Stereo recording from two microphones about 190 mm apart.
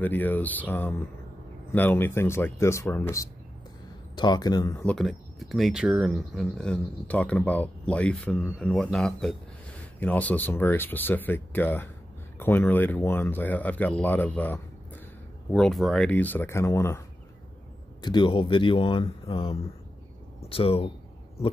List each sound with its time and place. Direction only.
0.0 s speech: 10° left (ahead or behind)
4.8 s speech: centre (ahead or behind)
18.0 s speech: 25° left (ahead or behind)